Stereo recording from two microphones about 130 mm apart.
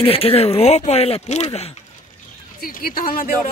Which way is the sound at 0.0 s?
45° left (ahead or behind).